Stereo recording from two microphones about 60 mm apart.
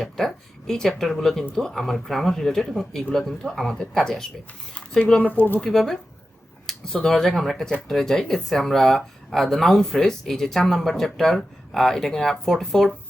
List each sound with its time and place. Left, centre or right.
0.0 s speech: centre
3.8 s speech: centre
5.2 s speech: left
5.5 s speech: centre